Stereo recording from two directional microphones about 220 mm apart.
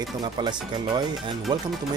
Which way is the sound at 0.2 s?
20° right (ahead or behind).